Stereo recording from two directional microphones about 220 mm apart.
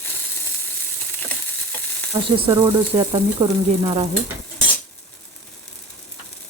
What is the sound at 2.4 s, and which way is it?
Speech, 20° right (ahead or behind).